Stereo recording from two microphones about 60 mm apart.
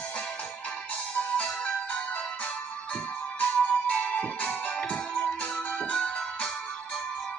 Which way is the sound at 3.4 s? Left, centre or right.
Left.